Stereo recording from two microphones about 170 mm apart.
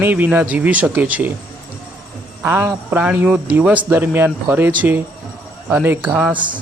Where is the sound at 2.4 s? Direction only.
15° right (ahead or behind).